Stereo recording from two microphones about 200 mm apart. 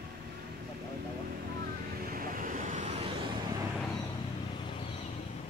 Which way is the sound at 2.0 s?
45° right (ahead or behind).